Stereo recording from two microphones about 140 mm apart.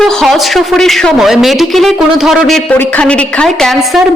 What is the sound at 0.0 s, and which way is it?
A woman's voice, 5° left (ahead or behind).